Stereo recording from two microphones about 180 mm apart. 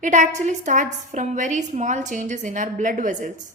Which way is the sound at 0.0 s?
45° right (ahead or behind).